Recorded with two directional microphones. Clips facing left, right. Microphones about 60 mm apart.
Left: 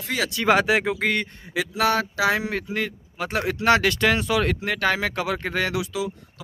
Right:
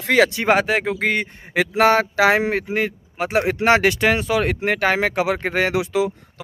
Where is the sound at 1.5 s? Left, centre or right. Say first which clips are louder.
Right 6 dB; right.